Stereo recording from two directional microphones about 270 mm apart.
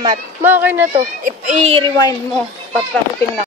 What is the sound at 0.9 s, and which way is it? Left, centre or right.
Speech, right.